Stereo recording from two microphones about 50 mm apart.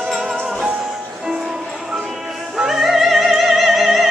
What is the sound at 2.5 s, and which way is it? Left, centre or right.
Opera, centre.